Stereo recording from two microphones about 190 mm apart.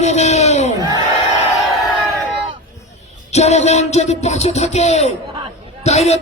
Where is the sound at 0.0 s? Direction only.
35° left (ahead or behind).